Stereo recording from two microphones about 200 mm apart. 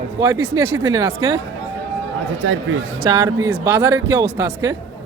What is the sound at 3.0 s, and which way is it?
Speech, 20° right (ahead or behind).